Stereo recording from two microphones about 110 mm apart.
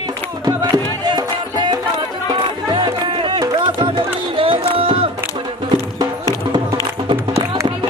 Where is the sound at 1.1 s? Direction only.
45° right (ahead or behind).